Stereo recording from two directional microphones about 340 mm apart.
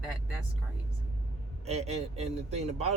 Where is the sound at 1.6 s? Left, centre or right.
Centre.